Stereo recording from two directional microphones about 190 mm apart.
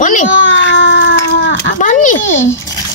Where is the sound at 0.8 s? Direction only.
70° left (ahead or behind).